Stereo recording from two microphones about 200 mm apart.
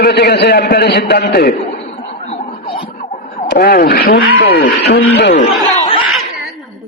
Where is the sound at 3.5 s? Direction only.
50° left (ahead or behind).